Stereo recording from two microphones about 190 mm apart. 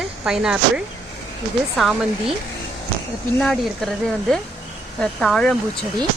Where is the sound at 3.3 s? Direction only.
Centre (ahead or behind).